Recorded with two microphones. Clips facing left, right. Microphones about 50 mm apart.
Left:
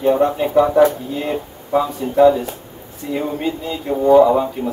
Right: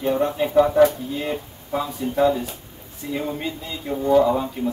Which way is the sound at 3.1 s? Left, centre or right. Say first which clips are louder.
Left 5 dB; centre.